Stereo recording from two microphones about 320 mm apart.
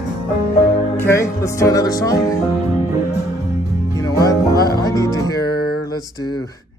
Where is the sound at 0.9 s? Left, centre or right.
Centre.